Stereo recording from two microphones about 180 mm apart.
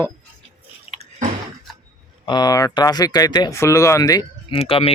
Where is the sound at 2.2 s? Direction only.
25° left (ahead or behind).